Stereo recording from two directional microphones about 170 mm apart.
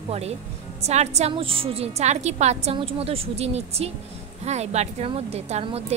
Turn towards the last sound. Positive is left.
turn(degrees=-40)  # may be behind; listen again after turning